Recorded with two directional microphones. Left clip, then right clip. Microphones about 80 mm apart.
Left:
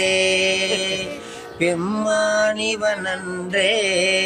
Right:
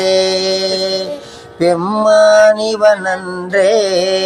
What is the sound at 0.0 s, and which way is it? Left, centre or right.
Music, left.